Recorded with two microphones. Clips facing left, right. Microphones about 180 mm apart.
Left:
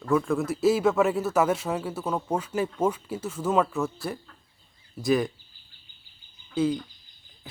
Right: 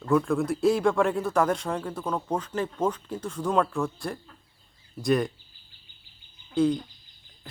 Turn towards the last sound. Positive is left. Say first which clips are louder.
# right 2 dB
turn(degrees=5)  # may be behind; listen again after turning